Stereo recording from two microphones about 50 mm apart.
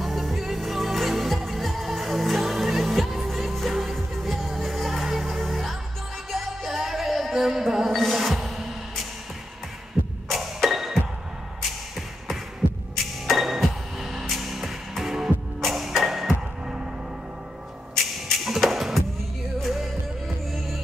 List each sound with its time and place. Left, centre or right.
0.0 s music: centre
10.2 s music: centre
12.9 s music: centre
17.9 s music: centre